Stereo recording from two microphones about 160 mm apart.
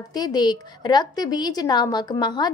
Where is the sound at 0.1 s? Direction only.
25° left (ahead or behind).